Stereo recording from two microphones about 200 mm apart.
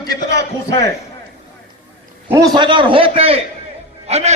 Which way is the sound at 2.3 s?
20° right (ahead or behind).